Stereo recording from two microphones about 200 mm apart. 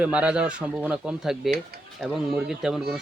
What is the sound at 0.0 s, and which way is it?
Speech, 5° right (ahead or behind).